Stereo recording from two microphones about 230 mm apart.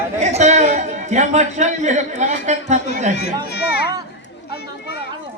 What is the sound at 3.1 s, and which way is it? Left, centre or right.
Speech, left.